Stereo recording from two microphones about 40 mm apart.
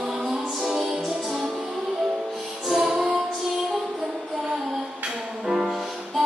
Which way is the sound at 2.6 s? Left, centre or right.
Centre.